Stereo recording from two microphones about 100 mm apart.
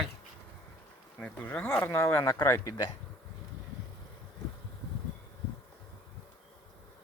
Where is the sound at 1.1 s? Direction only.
15° left (ahead or behind).